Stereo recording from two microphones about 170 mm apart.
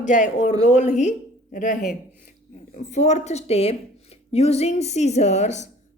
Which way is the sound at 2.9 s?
45° left (ahead or behind).